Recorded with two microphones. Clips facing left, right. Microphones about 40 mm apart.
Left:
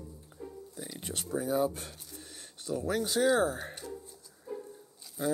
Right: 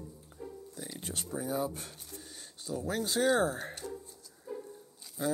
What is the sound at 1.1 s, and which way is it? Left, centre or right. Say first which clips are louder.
Speech: left 4 dB; left.